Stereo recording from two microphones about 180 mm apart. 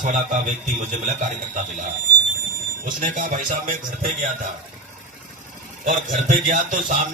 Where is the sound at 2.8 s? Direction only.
45° right (ahead or behind).